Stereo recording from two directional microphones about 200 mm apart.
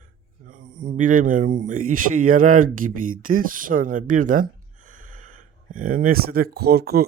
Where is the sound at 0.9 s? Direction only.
40° right (ahead or behind).